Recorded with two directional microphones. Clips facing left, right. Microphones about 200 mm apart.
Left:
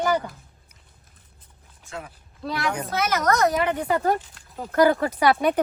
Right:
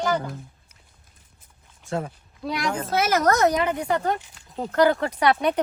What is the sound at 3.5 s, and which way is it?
Speech, 5° left (ahead or behind).